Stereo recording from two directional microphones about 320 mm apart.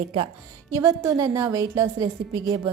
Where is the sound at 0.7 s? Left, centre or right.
Centre.